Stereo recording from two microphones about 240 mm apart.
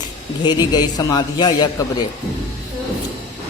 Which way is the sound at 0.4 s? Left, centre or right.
Centre.